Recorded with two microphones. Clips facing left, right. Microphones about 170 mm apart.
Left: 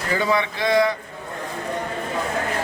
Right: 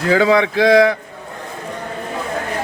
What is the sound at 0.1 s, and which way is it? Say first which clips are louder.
Speech: right 8 dB; 90° right.